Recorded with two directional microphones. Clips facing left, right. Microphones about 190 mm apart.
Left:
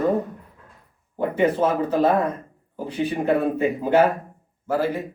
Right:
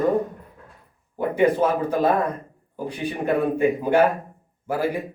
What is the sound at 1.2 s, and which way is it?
A man's voice, 10° right (ahead or behind).